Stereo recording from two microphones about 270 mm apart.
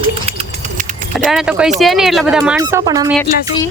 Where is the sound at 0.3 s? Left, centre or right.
Right.